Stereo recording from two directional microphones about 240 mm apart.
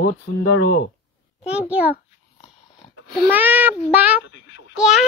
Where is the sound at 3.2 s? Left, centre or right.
Centre.